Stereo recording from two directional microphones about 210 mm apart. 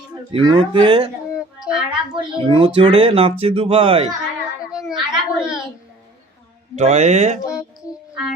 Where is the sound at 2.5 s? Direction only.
25° right (ahead or behind).